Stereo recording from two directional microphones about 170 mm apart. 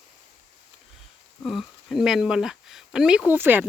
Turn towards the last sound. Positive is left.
turn(degrees=-10)  # may be behind; listen again after turning